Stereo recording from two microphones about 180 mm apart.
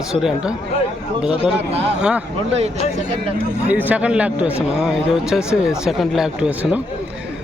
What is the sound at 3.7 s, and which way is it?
Speech, 10° right (ahead or behind).